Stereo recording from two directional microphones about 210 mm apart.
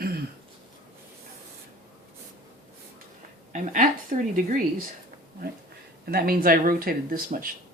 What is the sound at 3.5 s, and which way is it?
A woman's voice, 40° right (ahead or behind).